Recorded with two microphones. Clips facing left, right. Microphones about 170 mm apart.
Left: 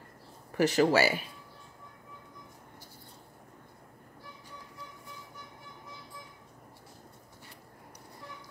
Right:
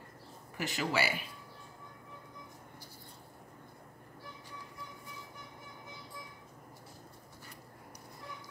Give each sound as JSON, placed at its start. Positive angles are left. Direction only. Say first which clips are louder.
{"t": 0.6, "sound": "speech", "louder": "left 10 dB", "side_deg": 40}